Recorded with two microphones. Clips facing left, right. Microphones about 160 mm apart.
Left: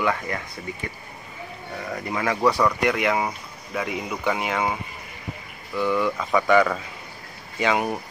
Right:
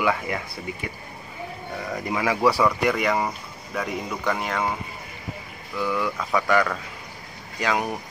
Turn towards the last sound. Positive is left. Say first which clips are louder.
# left 2 dB
turn(degrees=0)  # may be behind; listen again after turning